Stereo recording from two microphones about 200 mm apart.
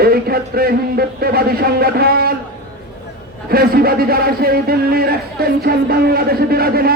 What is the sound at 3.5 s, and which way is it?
A man's voice, 50° right (ahead or behind).